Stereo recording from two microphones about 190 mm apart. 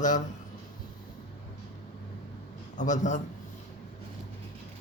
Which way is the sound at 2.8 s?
40° left (ahead or behind).